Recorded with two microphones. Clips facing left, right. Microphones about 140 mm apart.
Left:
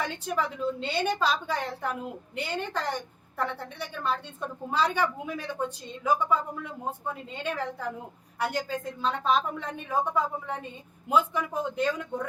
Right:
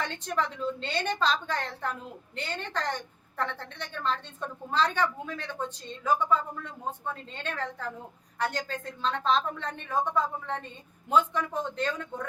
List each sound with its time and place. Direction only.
0.0 s a woman's voice: 10° left (ahead or behind)